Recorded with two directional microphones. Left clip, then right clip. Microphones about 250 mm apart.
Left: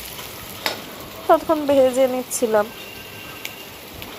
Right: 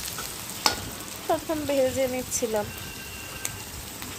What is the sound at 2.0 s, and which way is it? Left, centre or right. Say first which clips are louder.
Speech: left 9 dB; centre.